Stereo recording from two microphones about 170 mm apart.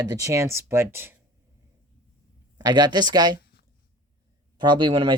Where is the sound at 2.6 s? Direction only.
25° right (ahead or behind).